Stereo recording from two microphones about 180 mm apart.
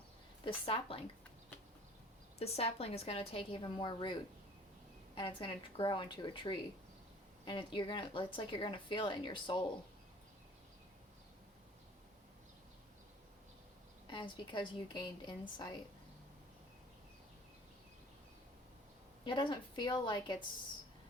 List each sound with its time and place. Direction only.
0.4 s a woman's voice: 30° left (ahead or behind)
2.4 s a woman's voice: 35° left (ahead or behind)
14.1 s a woman's voice: 25° left (ahead or behind)
19.2 s a woman's voice: 25° left (ahead or behind)